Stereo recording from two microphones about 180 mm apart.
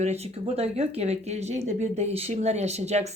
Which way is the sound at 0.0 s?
35° right (ahead or behind).